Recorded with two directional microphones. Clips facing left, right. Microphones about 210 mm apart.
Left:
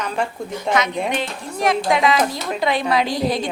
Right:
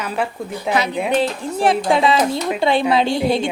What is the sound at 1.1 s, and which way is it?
A woman's voice, 30° right (ahead or behind).